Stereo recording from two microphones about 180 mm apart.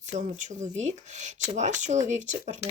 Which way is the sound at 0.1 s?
40° right (ahead or behind).